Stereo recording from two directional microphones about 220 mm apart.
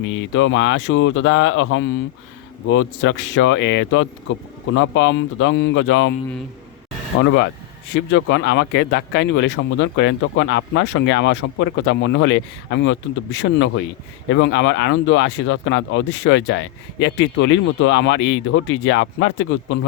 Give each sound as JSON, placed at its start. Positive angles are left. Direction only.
{"t": 0.0, "sound": "speech", "side_deg": 60}
{"t": 7.2, "sound": "speech", "side_deg": 55}